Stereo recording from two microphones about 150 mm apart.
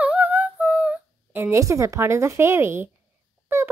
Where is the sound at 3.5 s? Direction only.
15° right (ahead or behind).